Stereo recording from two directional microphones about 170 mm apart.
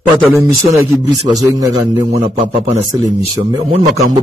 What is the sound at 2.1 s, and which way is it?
Speech, 35° right (ahead or behind).